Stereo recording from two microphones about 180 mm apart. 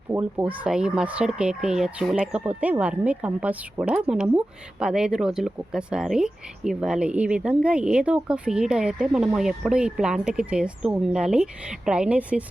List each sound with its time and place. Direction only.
0.1 s speech: 10° right (ahead or behind)